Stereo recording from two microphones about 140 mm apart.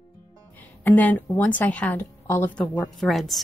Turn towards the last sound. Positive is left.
turn(degrees=0)  # may be behind; listen again after turning